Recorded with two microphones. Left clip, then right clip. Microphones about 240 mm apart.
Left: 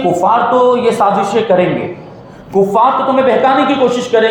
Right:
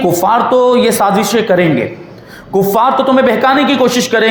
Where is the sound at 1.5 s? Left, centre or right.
Right.